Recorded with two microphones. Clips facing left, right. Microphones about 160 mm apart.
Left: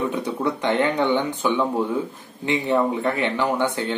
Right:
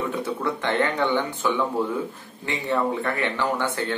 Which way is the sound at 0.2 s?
15° left (ahead or behind).